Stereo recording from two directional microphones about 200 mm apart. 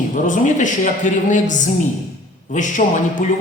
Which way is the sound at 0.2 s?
40° left (ahead or behind).